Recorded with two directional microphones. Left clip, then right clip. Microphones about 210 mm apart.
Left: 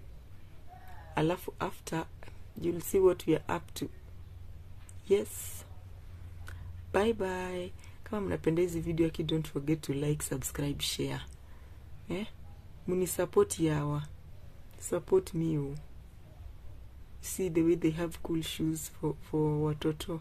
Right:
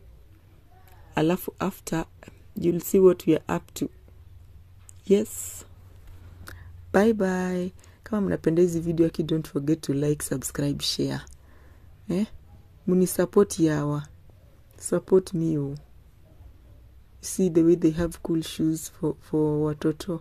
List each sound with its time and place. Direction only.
1.1 s speech: 30° right (ahead or behind)
5.0 s speech: 25° right (ahead or behind)
6.4 s a sound: 30° right (ahead or behind)
8.2 s speech: 20° right (ahead or behind)
17.4 s speech: 15° right (ahead or behind)